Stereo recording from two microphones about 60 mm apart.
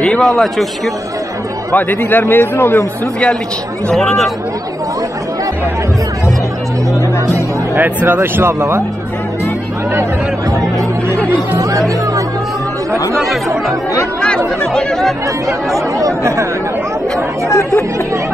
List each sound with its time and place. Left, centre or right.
0.0 s a man's voice: centre
1.7 s speech: left
3.9 s a man's voice: centre
7.7 s speech: right
8.2 s speech: right
11.5 s chatter: right
14.6 s speech: centre
15.4 s speech: right